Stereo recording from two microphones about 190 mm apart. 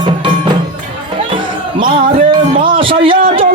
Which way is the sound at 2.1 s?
30° right (ahead or behind).